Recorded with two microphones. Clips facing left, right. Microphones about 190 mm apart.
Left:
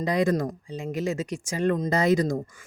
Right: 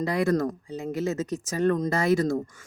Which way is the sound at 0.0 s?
15° left (ahead or behind).